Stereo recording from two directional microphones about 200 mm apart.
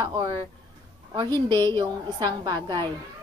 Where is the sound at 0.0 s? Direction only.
20° right (ahead or behind).